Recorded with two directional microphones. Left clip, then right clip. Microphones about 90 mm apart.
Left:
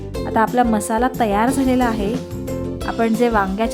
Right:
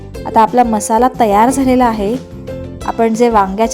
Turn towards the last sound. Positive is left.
turn(degrees=-25)  # may be behind; listen again after turning